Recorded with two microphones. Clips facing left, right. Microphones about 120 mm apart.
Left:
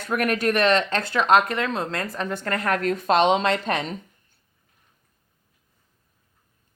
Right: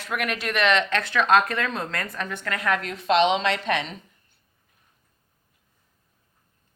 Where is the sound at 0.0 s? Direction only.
50° left (ahead or behind).